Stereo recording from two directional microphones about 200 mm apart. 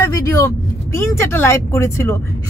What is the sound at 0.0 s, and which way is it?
Vehicle, 15° left (ahead or behind).